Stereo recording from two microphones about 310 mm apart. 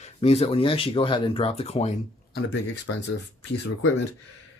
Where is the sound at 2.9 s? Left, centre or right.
Left.